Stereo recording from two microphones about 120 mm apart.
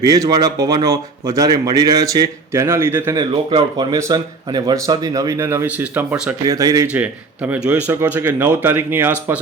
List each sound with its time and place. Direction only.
0.0 s speech: 30° right (ahead or behind)
3.9 s speech: 35° right (ahead or behind); by 6.3 s 10° right (ahead or behind)
6.4 s speech: 30° right (ahead or behind)
6.9 s speech: 15° right (ahead or behind)